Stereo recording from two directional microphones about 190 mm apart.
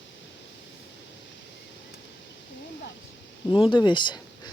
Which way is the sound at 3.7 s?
25° left (ahead or behind).